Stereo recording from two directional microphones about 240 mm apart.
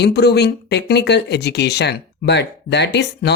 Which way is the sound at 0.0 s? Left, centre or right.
Left.